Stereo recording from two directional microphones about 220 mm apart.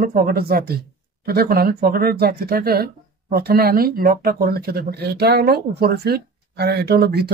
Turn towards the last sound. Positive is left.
turn(degrees=-45)  # may be behind; listen again after turning